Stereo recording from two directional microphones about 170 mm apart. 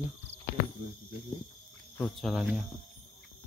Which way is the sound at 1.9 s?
5° left (ahead or behind).